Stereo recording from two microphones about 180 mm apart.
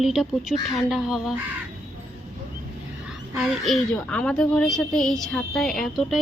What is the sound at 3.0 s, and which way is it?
Speech, 5° right (ahead or behind).